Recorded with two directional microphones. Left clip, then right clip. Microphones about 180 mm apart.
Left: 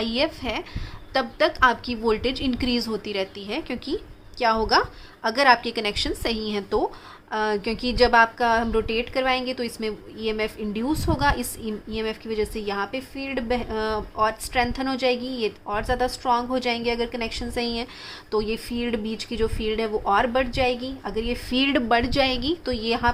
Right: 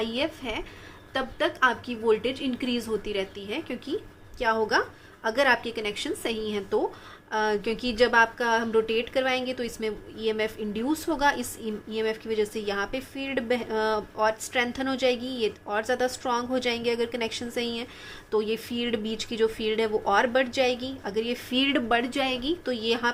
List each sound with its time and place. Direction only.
0.0 s a woman's voice: 30° left (ahead or behind)